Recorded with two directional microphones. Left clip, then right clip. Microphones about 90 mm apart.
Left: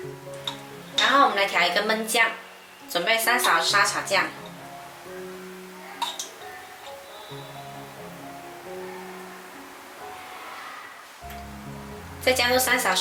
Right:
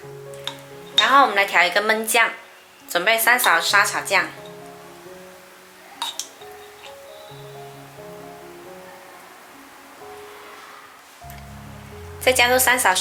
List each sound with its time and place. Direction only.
0.9 s a woman's voice: 25° right (ahead or behind)
12.2 s a woman's voice: 30° right (ahead or behind)